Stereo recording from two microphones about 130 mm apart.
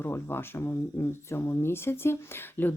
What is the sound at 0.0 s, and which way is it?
Speech, 15° left (ahead or behind).